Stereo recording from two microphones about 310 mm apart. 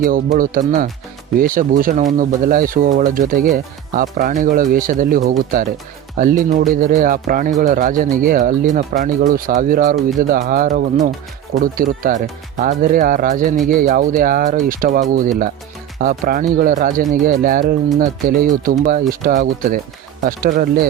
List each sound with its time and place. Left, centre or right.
0.0 s speech: right